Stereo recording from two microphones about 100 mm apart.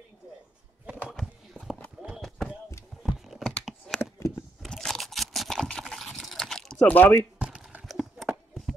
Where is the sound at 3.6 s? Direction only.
5° left (ahead or behind).